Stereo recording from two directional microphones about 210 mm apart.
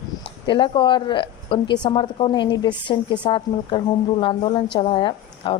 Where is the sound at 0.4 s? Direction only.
25° left (ahead or behind).